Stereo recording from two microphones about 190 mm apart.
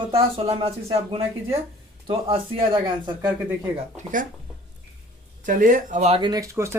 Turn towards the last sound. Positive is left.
turn(degrees=-15)  # may be behind; listen again after turning